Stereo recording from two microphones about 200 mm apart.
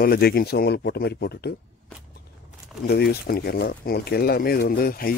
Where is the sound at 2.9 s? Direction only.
50° left (ahead or behind).